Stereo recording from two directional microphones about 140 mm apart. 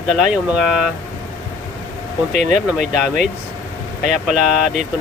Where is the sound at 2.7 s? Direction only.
5° right (ahead or behind).